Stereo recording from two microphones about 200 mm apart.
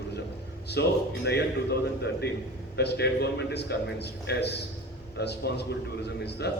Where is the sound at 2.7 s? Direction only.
55° left (ahead or behind).